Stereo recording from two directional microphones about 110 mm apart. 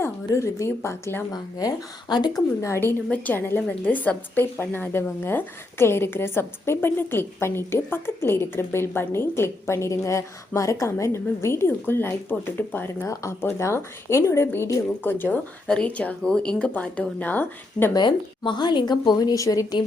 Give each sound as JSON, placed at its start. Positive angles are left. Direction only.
{"t": 0.3, "sound": "speech", "side_deg": 25}
{"t": 2.6, "sound": "a woman's voice", "side_deg": 25}
{"t": 17.9, "sound": "speech", "side_deg": 45}